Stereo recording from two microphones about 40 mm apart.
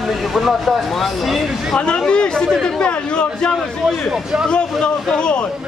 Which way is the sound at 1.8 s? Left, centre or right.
Left.